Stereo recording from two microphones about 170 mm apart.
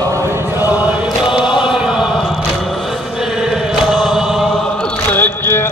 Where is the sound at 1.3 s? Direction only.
5° right (ahead or behind).